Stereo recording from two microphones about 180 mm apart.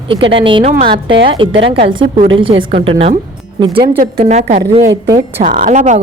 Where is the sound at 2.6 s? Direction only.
35° right (ahead or behind).